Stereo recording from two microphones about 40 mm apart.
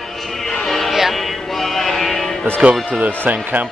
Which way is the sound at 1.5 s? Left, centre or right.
Centre.